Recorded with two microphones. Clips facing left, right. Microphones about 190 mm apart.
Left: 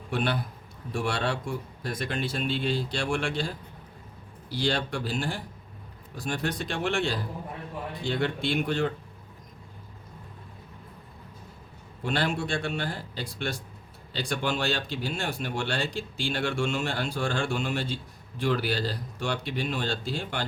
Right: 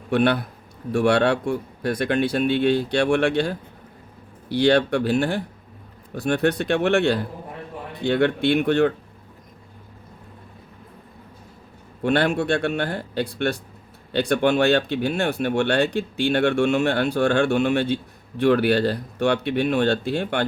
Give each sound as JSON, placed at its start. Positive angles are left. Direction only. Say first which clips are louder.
{"t": 0.1, "sound": "speech", "louder": "right 9 dB", "side_deg": -65}
{"t": 12.0, "sound": "speech", "louder": "right 9 dB", "side_deg": -60}